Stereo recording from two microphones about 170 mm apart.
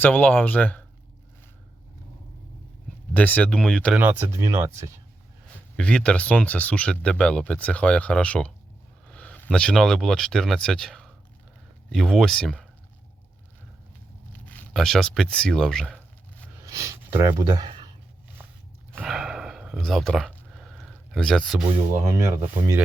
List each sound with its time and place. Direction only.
0.0 s speech: 10° left (ahead or behind)
3.1 s speech: 10° left (ahead or behind)
3.9 s speech: 10° right (ahead or behind)
5.7 s speech: 5° left (ahead or behind)
14.3 s a sound: 10° left (ahead or behind)
16.6 s speech: 20° right (ahead or behind)
18.9 s a sound: 5° right (ahead or behind)